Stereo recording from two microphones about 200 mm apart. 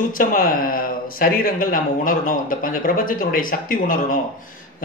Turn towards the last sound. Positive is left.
turn(degrees=40)  # may be behind; listen again after turning